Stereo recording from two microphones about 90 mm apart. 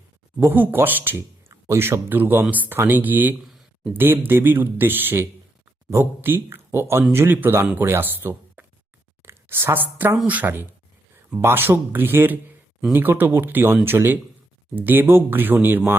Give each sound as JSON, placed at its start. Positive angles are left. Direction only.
{"t": 0.3, "sound": "speech", "side_deg": -20}